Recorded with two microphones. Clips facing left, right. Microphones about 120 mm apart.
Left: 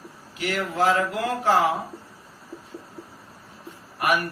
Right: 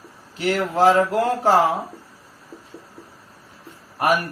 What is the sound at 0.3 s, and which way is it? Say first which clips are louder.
Speech: right 5 dB; 35° right (ahead or behind).